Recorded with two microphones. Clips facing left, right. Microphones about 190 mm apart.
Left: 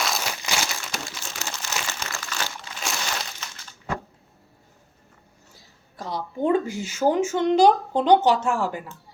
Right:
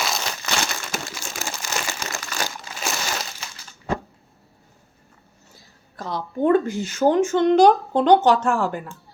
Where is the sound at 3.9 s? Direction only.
30° right (ahead or behind).